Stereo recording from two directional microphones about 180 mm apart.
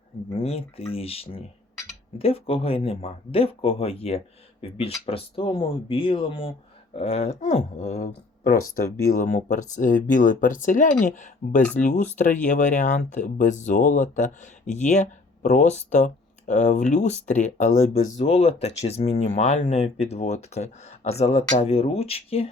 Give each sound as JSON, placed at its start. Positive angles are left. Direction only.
{"t": 0.3, "sound": "speech", "side_deg": 35}